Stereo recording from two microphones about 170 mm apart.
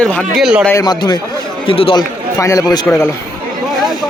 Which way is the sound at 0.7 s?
20° left (ahead or behind).